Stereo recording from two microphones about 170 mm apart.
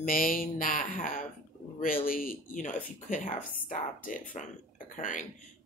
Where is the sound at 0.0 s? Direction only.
55° left (ahead or behind).